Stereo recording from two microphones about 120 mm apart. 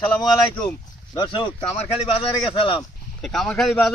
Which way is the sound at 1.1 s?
35° left (ahead or behind).